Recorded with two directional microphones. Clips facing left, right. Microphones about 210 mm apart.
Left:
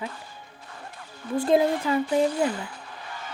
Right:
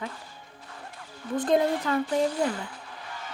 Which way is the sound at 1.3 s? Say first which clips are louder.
Left 2 dB; 5° left (ahead or behind).